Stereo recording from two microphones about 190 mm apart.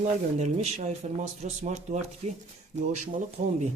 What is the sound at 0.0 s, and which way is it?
Speech, 35° right (ahead or behind).